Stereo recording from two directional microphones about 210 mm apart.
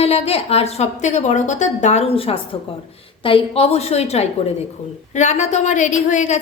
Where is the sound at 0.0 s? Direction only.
30° left (ahead or behind).